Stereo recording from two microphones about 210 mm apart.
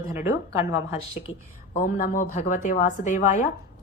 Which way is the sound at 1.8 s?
40° left (ahead or behind).